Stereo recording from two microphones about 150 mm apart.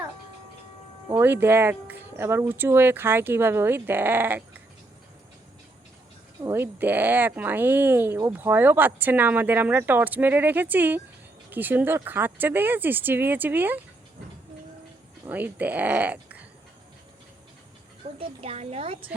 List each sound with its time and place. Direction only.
1.1 s speech: 15° right (ahead or behind)
6.4 s speech: 15° right (ahead or behind)
15.3 s speech: 10° right (ahead or behind)
18.2 s a woman's voice: 45° right (ahead or behind)